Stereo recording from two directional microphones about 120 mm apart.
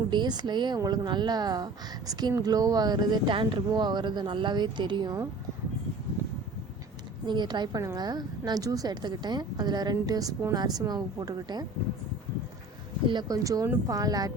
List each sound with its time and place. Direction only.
0.1 s speech: 40° right (ahead or behind)
7.3 s speech: 40° right (ahead or behind)
13.1 s speech: 35° right (ahead or behind)